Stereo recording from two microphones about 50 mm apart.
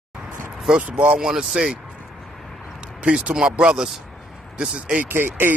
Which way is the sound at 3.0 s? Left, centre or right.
Right.